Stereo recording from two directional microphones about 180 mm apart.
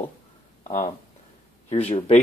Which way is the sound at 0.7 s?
40° left (ahead or behind).